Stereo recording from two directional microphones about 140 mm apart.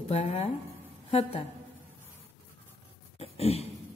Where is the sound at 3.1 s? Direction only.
45° left (ahead or behind).